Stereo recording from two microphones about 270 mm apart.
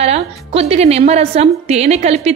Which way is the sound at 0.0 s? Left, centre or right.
Right.